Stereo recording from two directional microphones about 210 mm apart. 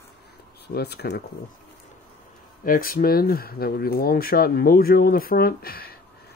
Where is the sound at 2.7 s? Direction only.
40° left (ahead or behind).